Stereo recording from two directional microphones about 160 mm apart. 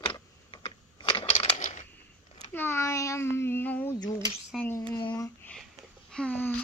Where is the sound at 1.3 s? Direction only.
50° left (ahead or behind).